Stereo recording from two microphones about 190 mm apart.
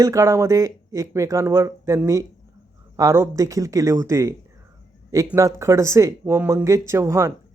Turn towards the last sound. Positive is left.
turn(degrees=-15)  # may be behind; listen again after turning